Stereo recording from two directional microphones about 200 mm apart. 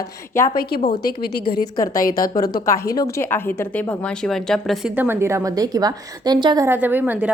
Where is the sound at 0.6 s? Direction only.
50° left (ahead or behind).